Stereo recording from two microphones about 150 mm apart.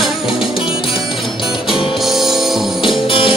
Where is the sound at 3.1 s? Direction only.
35° left (ahead or behind).